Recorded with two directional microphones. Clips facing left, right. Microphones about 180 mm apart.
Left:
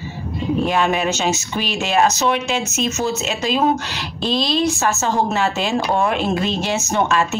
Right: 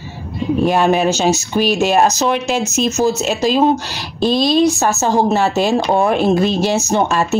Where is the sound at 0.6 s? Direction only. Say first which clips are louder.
Right 6 dB; 40° right (ahead or behind).